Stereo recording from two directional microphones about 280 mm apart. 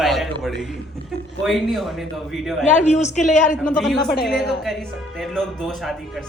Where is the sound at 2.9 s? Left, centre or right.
Left.